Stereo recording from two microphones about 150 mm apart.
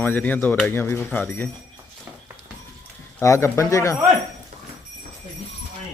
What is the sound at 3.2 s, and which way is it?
Speech, 20° left (ahead or behind).